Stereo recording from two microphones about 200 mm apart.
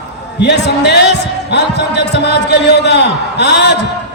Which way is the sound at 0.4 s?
60° left (ahead or behind).